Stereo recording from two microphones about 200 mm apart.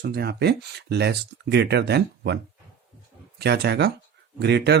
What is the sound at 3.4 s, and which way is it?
Speech, 55° right (ahead or behind).